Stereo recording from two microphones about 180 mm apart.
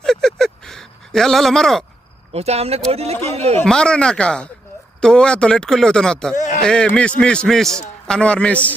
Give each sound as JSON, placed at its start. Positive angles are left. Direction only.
{"t": 0.0, "sound": "a sound", "side_deg": 0}
{"t": 2.3, "sound": "speech", "side_deg": -35}
{"t": 3.6, "sound": "a man's voice", "side_deg": 5}